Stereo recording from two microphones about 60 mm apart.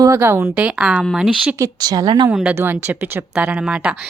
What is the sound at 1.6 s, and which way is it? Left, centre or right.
Speech, right.